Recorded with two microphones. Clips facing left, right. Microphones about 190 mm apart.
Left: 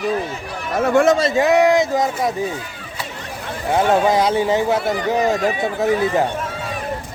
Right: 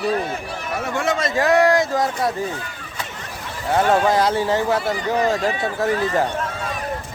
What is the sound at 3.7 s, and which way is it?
Speech, 15° left (ahead or behind).